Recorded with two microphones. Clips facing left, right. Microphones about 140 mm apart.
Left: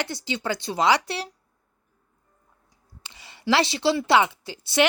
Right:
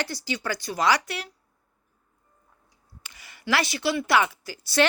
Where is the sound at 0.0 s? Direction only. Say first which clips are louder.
Left 1 dB; 20° left (ahead or behind).